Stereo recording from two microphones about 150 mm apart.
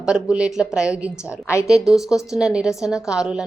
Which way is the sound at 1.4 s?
20° left (ahead or behind).